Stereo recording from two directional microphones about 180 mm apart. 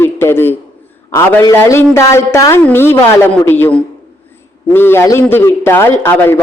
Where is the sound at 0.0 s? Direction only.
15° left (ahead or behind).